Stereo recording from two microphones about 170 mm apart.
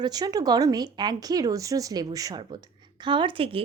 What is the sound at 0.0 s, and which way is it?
A woman's voice, 20° right (ahead or behind).